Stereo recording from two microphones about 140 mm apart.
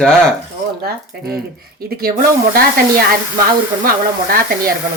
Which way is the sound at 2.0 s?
90° right.